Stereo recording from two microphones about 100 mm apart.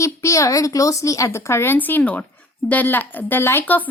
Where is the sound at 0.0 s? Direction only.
30° left (ahead or behind).